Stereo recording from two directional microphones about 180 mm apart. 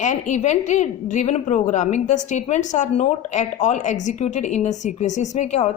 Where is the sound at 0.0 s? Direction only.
40° left (ahead or behind).